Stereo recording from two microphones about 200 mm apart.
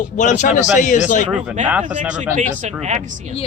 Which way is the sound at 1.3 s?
5° right (ahead or behind).